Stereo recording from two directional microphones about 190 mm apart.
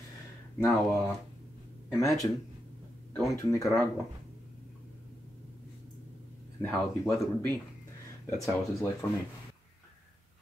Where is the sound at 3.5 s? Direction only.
15° left (ahead or behind).